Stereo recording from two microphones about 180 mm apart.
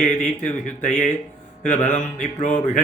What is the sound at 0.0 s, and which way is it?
Music, 45° left (ahead or behind).